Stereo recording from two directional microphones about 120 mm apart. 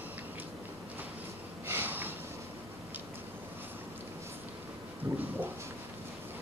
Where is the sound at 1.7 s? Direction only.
15° right (ahead or behind).